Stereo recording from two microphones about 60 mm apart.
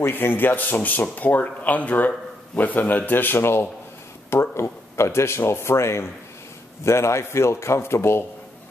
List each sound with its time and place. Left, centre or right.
0.0 s speech: left